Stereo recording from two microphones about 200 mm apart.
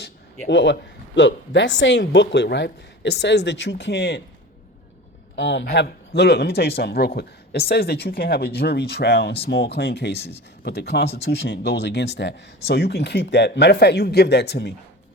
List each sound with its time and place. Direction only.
0.0 s a woman's voice: 60° left (ahead or behind)
5.4 s a woman's voice: 65° left (ahead or behind)